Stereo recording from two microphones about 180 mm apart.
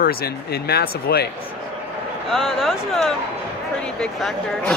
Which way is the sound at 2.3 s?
Centre (ahead or behind).